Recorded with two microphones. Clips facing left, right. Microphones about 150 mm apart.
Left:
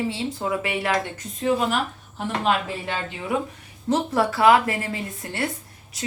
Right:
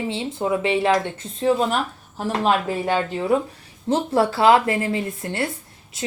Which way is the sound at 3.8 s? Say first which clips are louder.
Right 2 dB; 25° right (ahead or behind).